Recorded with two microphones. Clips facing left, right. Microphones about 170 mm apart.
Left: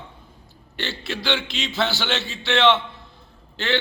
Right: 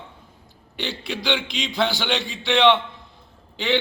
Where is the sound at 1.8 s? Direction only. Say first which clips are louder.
Right 2 dB; 15° right (ahead or behind).